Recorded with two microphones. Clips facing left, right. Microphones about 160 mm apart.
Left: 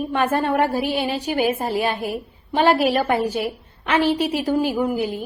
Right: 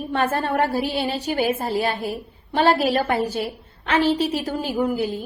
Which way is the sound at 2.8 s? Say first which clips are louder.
Left 2 dB; 40° right (ahead or behind).